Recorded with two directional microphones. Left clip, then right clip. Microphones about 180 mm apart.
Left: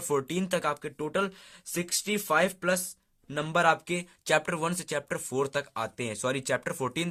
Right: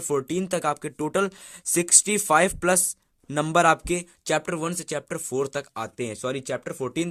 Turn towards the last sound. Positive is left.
turn(degrees=-20)  # may be behind; listen again after turning